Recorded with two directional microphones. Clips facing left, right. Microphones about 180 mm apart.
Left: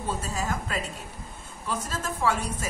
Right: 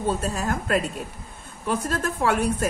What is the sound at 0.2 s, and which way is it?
A woman's voice, 60° right (ahead or behind).